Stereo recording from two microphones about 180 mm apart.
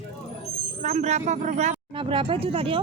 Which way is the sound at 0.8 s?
40° right (ahead or behind).